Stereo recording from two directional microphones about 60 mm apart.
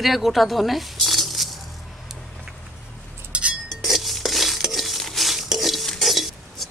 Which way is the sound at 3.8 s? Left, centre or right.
Centre.